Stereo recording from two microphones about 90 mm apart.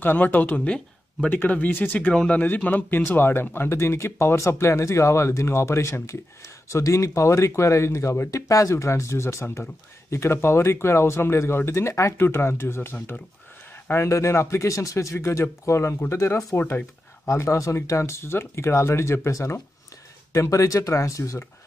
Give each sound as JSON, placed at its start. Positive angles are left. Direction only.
{"t": 0.0, "sound": "speech", "side_deg": 20}
{"t": 17.3, "sound": "speech", "side_deg": 35}